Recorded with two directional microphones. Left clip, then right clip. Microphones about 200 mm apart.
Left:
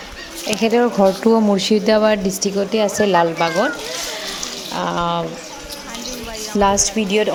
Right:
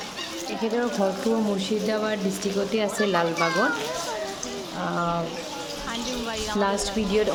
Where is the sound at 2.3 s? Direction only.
15° left (ahead or behind).